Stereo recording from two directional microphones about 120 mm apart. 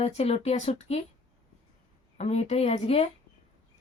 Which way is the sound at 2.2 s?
60° left (ahead or behind).